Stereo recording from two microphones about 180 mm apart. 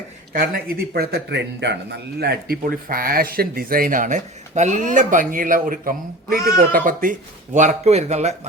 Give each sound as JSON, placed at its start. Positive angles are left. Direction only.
{"t": 0.3, "sound": "a man's voice", "side_deg": -55}